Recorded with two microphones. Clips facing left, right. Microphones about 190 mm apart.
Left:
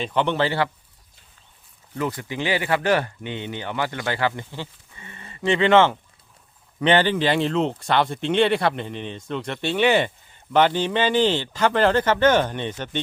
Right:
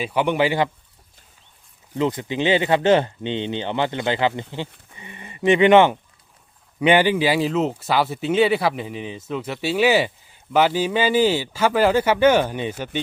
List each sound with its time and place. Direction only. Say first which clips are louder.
0.0 s speech: right 2 dB; 10° right (ahead or behind)
2.0 s speech: right 5 dB; 20° right (ahead or behind)